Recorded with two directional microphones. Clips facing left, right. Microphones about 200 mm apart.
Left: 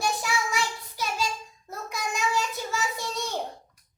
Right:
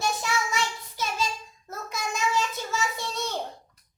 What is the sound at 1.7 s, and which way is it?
Child singing, 15° left (ahead or behind).